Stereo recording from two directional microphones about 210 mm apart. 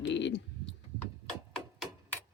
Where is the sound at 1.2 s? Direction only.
5° left (ahead or behind).